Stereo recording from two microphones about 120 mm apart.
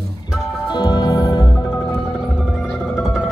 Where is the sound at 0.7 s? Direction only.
35° left (ahead or behind).